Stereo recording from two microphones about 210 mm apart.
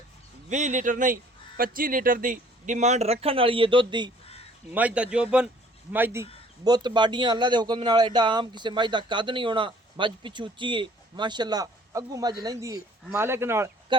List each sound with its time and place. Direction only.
0.5 s speech: 35° right (ahead or behind)
4.7 s a man's voice: 5° right (ahead or behind)